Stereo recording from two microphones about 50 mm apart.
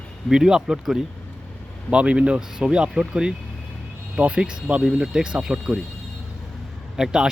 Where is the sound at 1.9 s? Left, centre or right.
Right.